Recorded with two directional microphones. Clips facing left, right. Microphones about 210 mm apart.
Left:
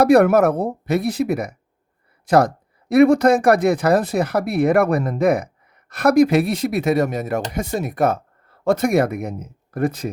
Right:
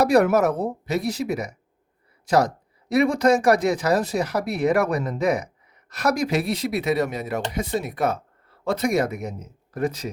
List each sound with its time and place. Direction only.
0.0 s speech: 55° left (ahead or behind)